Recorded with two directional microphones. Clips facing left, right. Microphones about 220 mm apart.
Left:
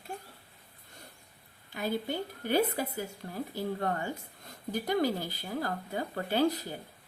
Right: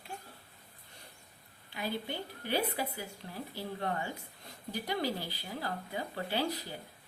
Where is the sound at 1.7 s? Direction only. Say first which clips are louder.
Left 5 dB; 45° left (ahead or behind).